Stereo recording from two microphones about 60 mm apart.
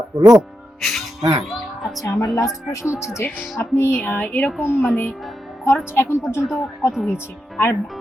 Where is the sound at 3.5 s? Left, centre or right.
Left.